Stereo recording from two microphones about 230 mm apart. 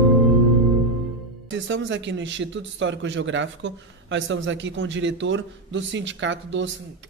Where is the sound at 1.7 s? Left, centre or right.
Right.